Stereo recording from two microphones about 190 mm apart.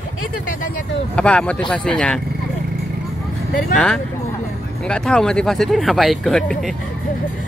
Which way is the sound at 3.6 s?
5° left (ahead or behind).